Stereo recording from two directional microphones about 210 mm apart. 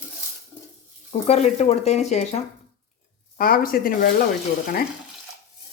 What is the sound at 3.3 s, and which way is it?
Speech, 40° left (ahead or behind).